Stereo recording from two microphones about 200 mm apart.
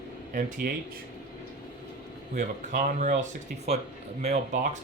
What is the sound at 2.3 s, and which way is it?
Speech, 40° right (ahead or behind).